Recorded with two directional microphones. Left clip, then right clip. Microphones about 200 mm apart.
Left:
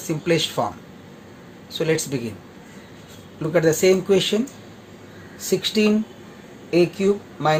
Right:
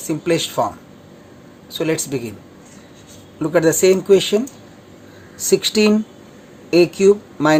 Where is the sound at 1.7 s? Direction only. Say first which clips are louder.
Right 1 dB; 25° right (ahead or behind).